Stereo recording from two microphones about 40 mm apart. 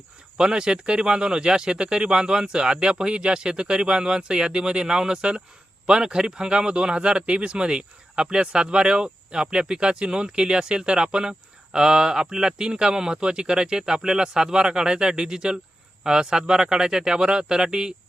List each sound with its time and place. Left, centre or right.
0.3 s a man's voice: centre